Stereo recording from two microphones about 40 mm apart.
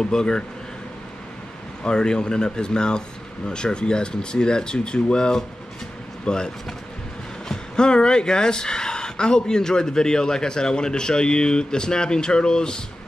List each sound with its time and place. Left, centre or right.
0.0 s speech: centre
1.9 s speech: centre